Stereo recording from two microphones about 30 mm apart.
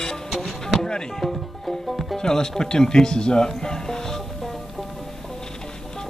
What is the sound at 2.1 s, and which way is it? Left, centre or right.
Speech, centre.